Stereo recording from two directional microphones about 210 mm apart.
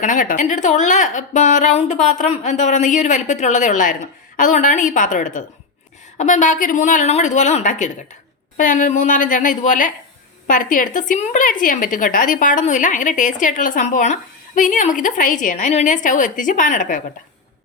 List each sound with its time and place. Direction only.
0.0 s a woman's voice: 40° left (ahead or behind)